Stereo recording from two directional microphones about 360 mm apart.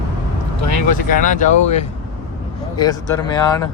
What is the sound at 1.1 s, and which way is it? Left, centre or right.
Speech, left.